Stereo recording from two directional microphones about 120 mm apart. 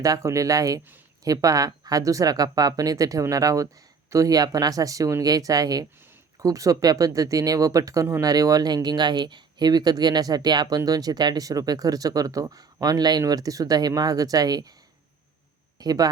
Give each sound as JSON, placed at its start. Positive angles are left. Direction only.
{"t": 0.0, "sound": "speech", "side_deg": -25}
{"t": 15.8, "sound": "speech", "side_deg": -30}